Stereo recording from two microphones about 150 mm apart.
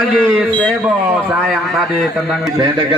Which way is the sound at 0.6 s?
Centre (ahead or behind).